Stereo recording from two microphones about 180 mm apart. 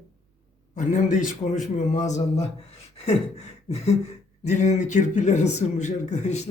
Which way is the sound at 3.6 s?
35° left (ahead or behind).